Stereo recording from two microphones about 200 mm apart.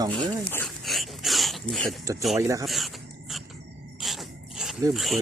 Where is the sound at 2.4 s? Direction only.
15° right (ahead or behind).